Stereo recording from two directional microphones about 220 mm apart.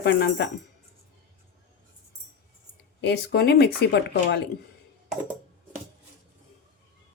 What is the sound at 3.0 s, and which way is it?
Speech, 50° left (ahead or behind).